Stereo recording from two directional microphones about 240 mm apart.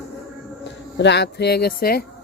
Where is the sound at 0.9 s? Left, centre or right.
Left.